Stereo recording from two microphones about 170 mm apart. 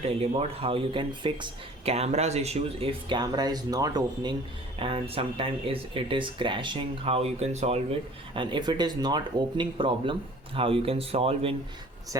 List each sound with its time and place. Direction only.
0.0 s speech: 35° right (ahead or behind)
8.3 s speech: 30° right (ahead or behind)